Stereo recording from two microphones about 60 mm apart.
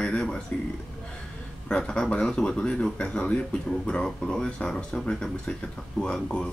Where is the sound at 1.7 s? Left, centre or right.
Centre.